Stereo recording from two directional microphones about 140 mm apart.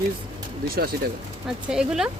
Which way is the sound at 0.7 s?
90° right.